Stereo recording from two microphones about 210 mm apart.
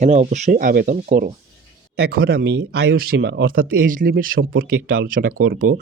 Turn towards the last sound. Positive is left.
turn(degrees=-40)  # may be behind; listen again after turning